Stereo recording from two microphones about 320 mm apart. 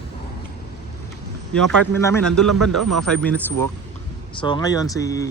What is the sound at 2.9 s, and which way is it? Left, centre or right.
Speech, centre.